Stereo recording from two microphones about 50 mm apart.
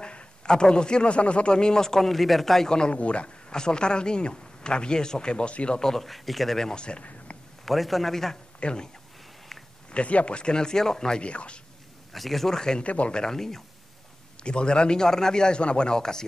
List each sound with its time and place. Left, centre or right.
0.0 s speech: centre
2.7 s speech: centre
5.8 s speech: centre
6.7 s speech: centre
7.6 s speech: centre
8.5 s speech: centre
9.9 s speech: left
12.1 s speech: centre
12.8 s speech: left
13.2 s speech: centre
14.4 s speech: centre